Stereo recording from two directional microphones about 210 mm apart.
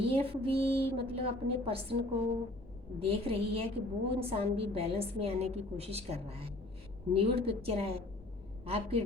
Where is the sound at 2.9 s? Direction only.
25° right (ahead or behind).